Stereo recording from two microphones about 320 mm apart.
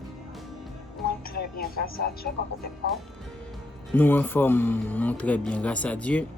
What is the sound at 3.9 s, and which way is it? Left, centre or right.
Speech, centre.